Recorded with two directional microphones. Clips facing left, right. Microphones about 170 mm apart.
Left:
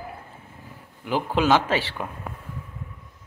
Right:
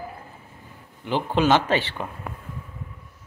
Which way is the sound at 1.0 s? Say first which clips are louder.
Right 1 dB; 5° left (ahead or behind).